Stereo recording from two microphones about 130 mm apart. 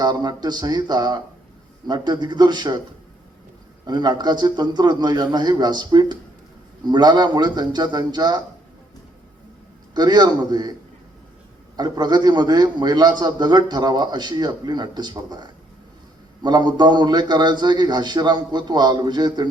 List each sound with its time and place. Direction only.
0.0 s a man's voice: 30° right (ahead or behind)
3.8 s a man's voice: 35° right (ahead or behind)
9.9 s a man's voice: 30° right (ahead or behind)
11.8 s a man's voice: 35° right (ahead or behind)